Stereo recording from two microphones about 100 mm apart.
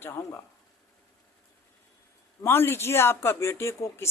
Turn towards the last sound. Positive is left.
turn(degrees=30)  # may be behind; listen again after turning